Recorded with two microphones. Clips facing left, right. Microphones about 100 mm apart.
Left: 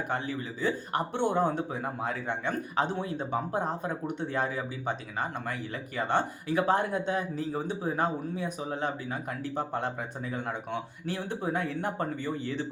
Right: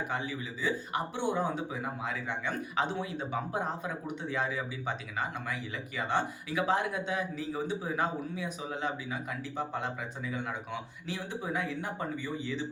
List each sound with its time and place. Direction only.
0.1 s speech: 50° left (ahead or behind)